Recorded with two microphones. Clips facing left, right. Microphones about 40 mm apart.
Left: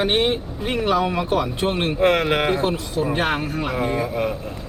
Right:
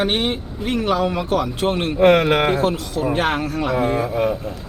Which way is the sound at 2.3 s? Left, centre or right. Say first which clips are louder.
Right 3 dB; right.